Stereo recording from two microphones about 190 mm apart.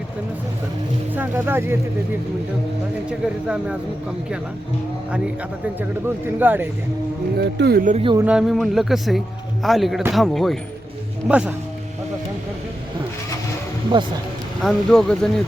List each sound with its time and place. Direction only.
1.1 s speech: 10° right (ahead or behind)
3.1 s speech: 5° right (ahead or behind)
6.4 s speech: 10° right (ahead or behind)
7.3 s speech: 60° right (ahead or behind)
7.9 s speech: 25° right (ahead or behind)
8.2 s speech: 5° right (ahead or behind)
13.9 s speech: 25° right (ahead or behind)
14.6 s speech: centre (ahead or behind)